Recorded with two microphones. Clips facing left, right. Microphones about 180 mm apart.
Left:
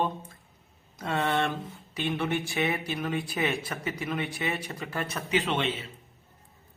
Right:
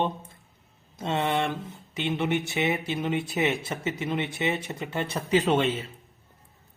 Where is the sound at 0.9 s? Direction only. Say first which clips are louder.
Right 1 dB; 25° right (ahead or behind); by 5.7 s 40° right (ahead or behind).